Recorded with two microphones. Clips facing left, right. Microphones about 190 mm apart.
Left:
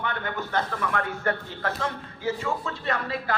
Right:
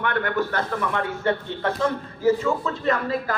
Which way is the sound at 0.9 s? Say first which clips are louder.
Right 2 dB; 25° right (ahead or behind).